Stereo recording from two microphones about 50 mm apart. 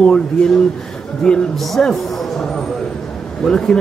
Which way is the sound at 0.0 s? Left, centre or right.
Centre.